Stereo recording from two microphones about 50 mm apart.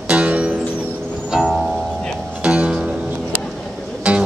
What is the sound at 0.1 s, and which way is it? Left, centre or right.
Music, right.